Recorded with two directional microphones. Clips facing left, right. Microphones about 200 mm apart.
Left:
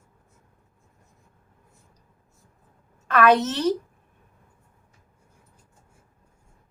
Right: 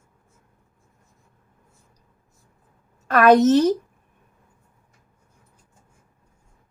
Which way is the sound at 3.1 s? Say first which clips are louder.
Right 5 dB; 40° right (ahead or behind).